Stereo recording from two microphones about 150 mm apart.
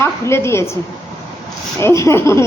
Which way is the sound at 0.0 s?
15° left (ahead or behind).